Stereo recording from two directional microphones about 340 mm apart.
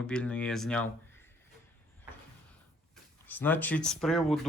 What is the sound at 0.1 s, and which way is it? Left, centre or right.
Speech, centre.